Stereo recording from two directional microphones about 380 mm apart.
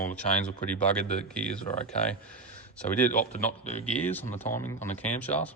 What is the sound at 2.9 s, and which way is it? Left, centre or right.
Speech, centre.